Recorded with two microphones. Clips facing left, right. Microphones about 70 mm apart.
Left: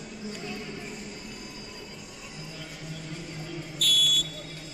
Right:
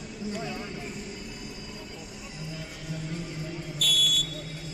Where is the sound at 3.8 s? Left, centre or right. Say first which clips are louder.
Even; centre.